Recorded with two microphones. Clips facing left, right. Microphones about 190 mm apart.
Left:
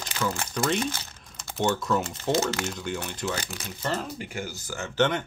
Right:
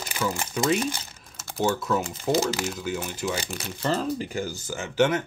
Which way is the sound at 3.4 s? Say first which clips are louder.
Right 3 dB; 35° right (ahead or behind).